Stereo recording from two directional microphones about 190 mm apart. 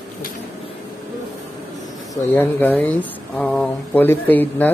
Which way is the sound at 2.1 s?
10° left (ahead or behind).